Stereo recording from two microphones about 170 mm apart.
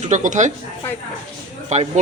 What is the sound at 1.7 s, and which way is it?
Speech, 45° right (ahead or behind).